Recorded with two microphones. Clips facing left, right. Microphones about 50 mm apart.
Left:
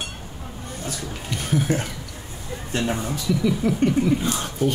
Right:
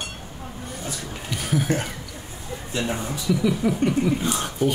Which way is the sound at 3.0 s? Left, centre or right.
Centre.